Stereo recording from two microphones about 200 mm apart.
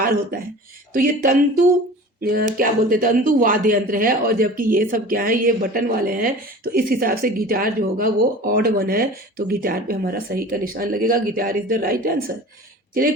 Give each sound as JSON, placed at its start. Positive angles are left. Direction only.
{"t": 0.0, "sound": "speech", "side_deg": -45}